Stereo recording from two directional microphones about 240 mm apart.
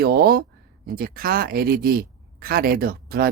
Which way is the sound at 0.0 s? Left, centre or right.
Right.